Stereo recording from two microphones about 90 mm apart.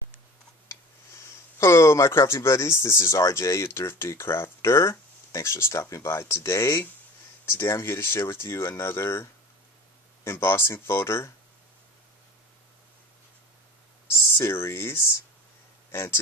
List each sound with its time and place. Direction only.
1.6 s speech: 30° left (ahead or behind)
14.3 s speech: 30° left (ahead or behind)